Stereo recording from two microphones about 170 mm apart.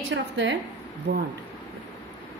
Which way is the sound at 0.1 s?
90° right.